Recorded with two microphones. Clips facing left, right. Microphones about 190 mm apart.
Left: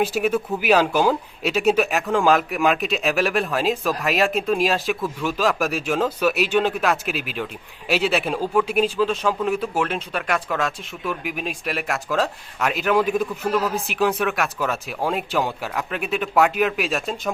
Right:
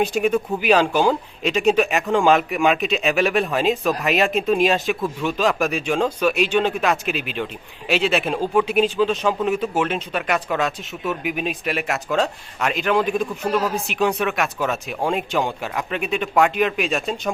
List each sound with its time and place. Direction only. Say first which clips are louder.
0.0 s speech: right 2 dB; 5° left (ahead or behind)